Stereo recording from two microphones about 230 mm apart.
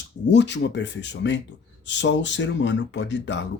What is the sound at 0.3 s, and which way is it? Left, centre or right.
Speech, left.